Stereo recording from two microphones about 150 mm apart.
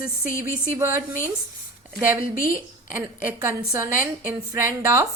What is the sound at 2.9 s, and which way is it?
A woman's voice, 15° right (ahead or behind).